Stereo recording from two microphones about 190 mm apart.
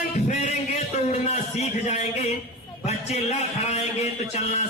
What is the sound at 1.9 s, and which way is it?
Speech, 35° left (ahead or behind).